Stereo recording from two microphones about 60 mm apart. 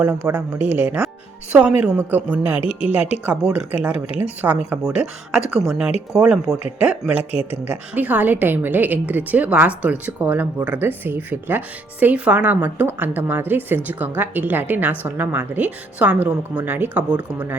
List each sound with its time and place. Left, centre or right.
0.2 s speech: right
1.5 s speech: centre
2.0 s speech: right
3.4 s speech: centre
3.8 s speech: right
5.3 s speech: centre
6.7 s a woman's voice: centre
17.0 s speech: centre